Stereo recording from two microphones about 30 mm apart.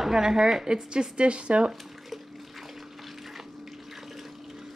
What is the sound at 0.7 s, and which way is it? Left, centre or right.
Speech, right.